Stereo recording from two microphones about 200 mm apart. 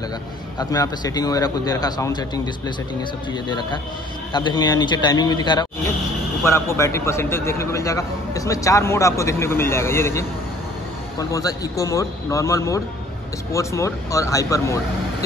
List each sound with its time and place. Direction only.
0.6 s a man's voice: 20° left (ahead or behind)